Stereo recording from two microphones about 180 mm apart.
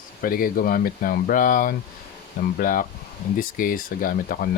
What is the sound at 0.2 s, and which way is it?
Speech, 50° left (ahead or behind).